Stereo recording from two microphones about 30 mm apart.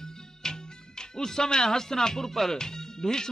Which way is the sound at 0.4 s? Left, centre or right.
Left.